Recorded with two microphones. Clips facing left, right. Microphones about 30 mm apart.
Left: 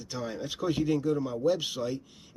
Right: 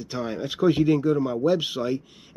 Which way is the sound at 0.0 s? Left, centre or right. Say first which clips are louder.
Right 6 dB; right.